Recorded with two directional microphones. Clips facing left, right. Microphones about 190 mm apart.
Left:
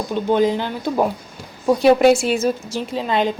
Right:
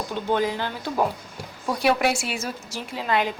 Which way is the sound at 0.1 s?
15° left (ahead or behind).